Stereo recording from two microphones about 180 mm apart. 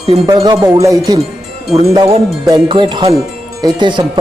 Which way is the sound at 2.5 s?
25° right (ahead or behind).